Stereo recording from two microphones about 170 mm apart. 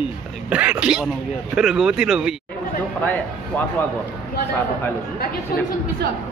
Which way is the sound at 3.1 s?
10° left (ahead or behind).